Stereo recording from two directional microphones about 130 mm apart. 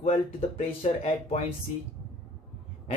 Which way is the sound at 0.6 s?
55° left (ahead or behind).